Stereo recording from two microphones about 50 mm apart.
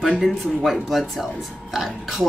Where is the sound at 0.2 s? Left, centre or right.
Centre.